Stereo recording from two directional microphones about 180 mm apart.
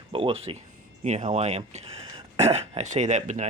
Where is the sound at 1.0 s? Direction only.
40° right (ahead or behind).